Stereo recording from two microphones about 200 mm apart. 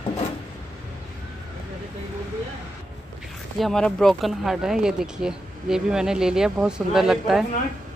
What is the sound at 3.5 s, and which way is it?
Speech, centre (ahead or behind).